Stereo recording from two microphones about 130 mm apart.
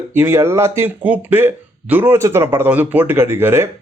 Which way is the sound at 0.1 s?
20° right (ahead or behind).